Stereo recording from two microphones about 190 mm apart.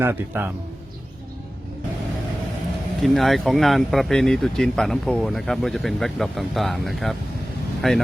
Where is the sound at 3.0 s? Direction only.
Centre (ahead or behind).